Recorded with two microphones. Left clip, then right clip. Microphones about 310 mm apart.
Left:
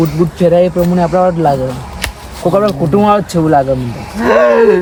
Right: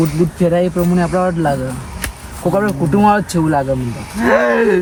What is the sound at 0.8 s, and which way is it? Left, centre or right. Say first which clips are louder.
Speech: left 5 dB; centre.